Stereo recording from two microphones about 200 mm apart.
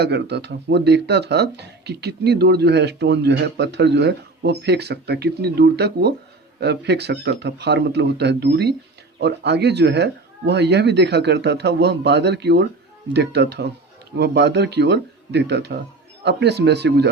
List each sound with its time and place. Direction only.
0.0 s speech: 55° right (ahead or behind)